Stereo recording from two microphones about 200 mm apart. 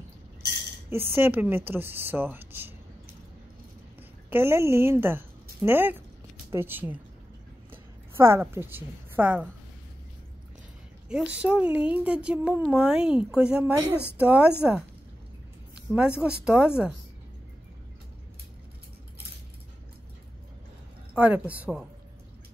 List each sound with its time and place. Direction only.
0.8 s speech: 10° right (ahead or behind)
4.3 s a woman's voice: 10° right (ahead or behind)
11.1 s a woman's voice: 5° right (ahead or behind)
21.1 s a woman's voice: 5° right (ahead or behind)